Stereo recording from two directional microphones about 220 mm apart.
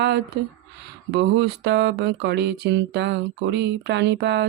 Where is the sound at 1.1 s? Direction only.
50° right (ahead or behind).